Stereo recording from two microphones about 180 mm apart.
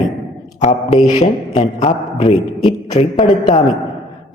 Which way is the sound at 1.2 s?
35° left (ahead or behind).